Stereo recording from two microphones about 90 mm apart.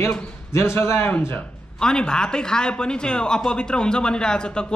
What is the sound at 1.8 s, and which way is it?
A man's voice, 10° left (ahead or behind).